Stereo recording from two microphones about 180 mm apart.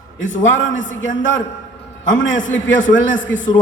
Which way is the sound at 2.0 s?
90° left.